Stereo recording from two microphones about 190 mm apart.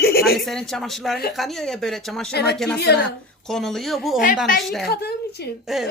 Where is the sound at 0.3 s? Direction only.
Centre (ahead or behind).